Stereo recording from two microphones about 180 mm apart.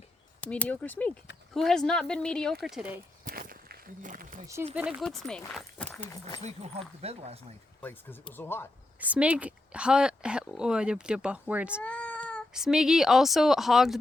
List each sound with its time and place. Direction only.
0.4 s speech: 5° left (ahead or behind)
3.2 s walk: 50° right (ahead or behind)
4.7 s speech: 5° right (ahead or behind)
5.5 s a sound: 5° left (ahead or behind)
6.4 s speech: 35° right (ahead or behind)
7.8 s speech: 10° left (ahead or behind)
9.0 s speech: 10° right (ahead or behind)
11.8 s cat: 5° left (ahead or behind)
12.5 s speech: 5° right (ahead or behind)